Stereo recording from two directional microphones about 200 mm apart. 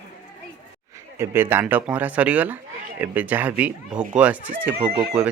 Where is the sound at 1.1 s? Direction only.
10° right (ahead or behind).